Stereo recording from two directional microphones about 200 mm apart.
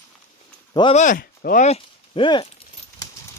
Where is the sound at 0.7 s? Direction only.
25° left (ahead or behind).